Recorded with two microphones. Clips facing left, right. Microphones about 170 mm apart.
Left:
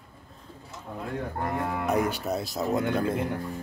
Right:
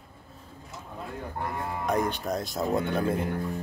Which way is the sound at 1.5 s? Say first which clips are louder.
Left 4 dB; 60° left (ahead or behind).